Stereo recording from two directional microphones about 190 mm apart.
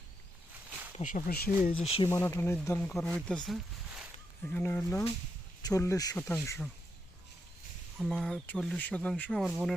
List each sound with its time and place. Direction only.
0.9 s speech: 40° left (ahead or behind)
1.8 s speech: 30° left (ahead or behind)
2.0 s speech: 15° left (ahead or behind)
3.2 s a sound: 5° left (ahead or behind)
4.5 s speech: 10° left (ahead or behind)
7.9 s speech: centre (ahead or behind)